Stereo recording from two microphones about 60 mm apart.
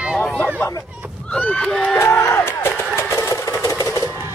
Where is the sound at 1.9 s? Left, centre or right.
Left.